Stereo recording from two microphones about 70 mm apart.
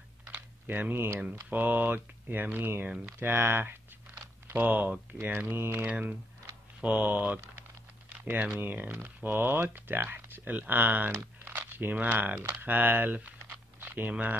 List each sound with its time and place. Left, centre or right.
0.3 s speech: right
1.5 s speech: right
4.1 s a sound: right
5.2 s speech: right
5.9 s speech: right
8.5 s speech: right
11.1 s a sound: right
11.5 s speech: right